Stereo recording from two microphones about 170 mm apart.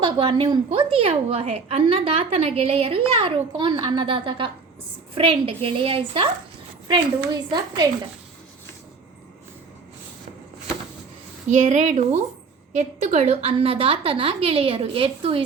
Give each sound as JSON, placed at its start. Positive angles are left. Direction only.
{"t": 0.0, "sound": "a woman's voice", "side_deg": -30}
{"t": 7.3, "sound": "a woman's voice", "side_deg": -25}
{"t": 11.4, "sound": "a woman's voice", "side_deg": -45}